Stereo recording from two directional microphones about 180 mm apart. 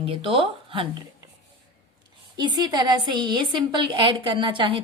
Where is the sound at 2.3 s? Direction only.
25° right (ahead or behind).